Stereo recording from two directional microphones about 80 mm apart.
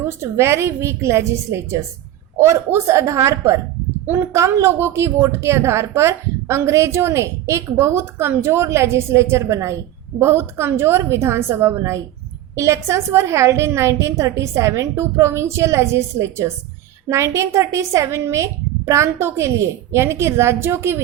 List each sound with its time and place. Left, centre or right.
0.0 s a woman's voice: right
4.4 s a woman's voice: right